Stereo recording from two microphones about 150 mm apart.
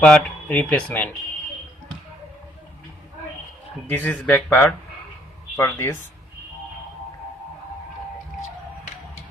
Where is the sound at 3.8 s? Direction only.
10° left (ahead or behind).